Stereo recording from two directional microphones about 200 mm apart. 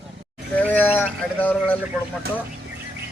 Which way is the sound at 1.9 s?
Centre (ahead or behind).